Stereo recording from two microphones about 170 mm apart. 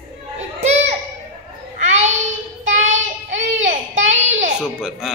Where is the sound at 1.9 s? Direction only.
45° right (ahead or behind).